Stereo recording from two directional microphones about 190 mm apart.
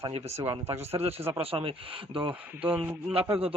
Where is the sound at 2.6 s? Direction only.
10° right (ahead or behind).